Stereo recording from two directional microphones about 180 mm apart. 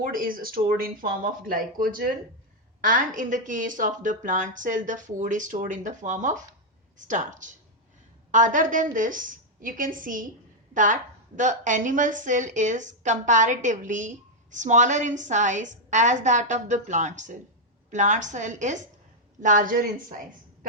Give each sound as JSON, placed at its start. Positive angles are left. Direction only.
{"t": 0.0, "sound": "a woman's voice", "side_deg": -50}
{"t": 11.3, "sound": "a woman's voice", "side_deg": -45}